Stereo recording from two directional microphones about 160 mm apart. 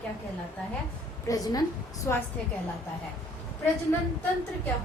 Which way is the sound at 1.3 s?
25° left (ahead or behind).